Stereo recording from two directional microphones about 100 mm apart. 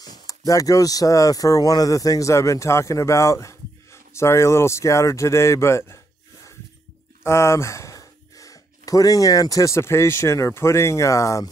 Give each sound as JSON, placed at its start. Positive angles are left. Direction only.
{"t": 0.0, "sound": "a sound", "side_deg": 40}
{"t": 0.5, "sound": "speech", "side_deg": 35}
{"t": 7.2, "sound": "speech", "side_deg": 25}